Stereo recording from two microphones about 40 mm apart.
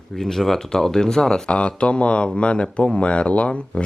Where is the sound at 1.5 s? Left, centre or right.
Left.